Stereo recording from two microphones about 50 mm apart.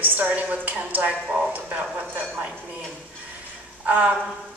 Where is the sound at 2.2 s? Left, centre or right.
Right.